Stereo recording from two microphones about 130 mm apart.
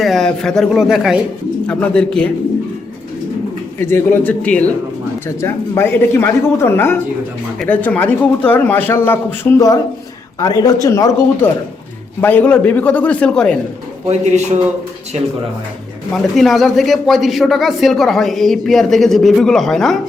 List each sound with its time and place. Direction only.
0.0 s a man's voice: centre (ahead or behind)
1.6 s a man's voice: 10° left (ahead or behind)
3.8 s a man's voice: 20° left (ahead or behind)
10.4 s speech: 30° left (ahead or behind)
12.2 s a man's voice: 10° left (ahead or behind)
14.1 s a man's voice: 60° right (ahead or behind)
16.1 s a man's voice: centre (ahead or behind)